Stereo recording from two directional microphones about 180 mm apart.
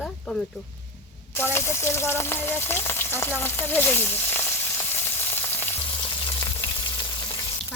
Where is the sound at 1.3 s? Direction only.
15° left (ahead or behind).